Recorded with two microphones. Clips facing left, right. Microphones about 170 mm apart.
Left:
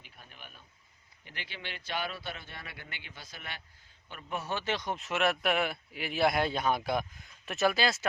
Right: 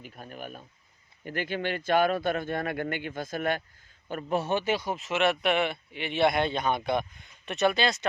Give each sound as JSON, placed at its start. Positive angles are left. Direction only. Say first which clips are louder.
{"t": 0.0, "sound": "speech", "louder": "right 13 dB", "side_deg": -45}
{"t": 4.1, "sound": "a man's voice", "louder": "right 10 dB", "side_deg": -35}
{"t": 4.4, "sound": "speech", "louder": "right 6 dB", "side_deg": -15}